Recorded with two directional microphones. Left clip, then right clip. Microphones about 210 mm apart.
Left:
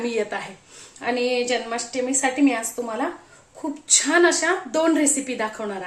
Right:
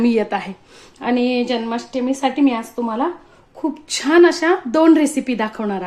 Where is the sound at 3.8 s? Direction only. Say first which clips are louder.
Right 5 dB; 35° right (ahead or behind).